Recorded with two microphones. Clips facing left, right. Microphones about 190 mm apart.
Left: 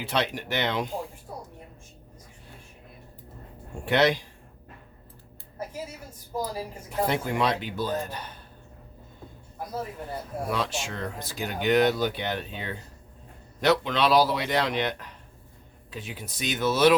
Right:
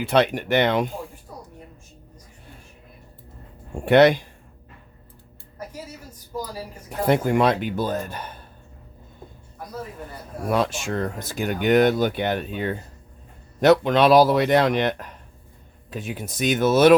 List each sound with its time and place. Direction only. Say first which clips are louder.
0.0 s speech: right 8 dB; 55° right (ahead or behind)
3.8 s speech: right 8 dB; 55° right (ahead or behind)
7.1 s speech: right 10 dB; 50° right (ahead or behind)
10.5 s speech: right 9 dB; 50° right (ahead or behind)